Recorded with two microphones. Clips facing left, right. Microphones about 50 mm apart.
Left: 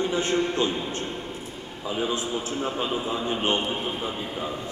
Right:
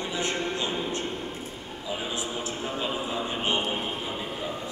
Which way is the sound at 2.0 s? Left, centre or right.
Left.